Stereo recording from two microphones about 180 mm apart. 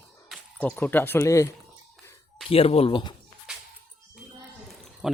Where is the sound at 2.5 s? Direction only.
35° left (ahead or behind).